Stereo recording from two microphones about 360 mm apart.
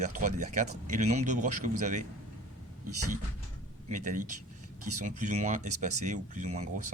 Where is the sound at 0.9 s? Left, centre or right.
Centre.